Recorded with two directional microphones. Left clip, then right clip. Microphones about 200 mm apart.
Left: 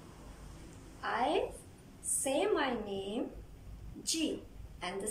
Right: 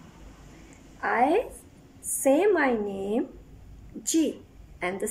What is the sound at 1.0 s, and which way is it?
A woman's voice, 35° right (ahead or behind).